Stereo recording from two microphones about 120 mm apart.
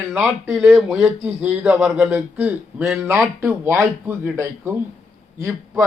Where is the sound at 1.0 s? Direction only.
15° right (ahead or behind).